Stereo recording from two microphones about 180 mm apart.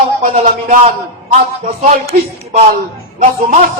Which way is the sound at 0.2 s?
45° right (ahead or behind).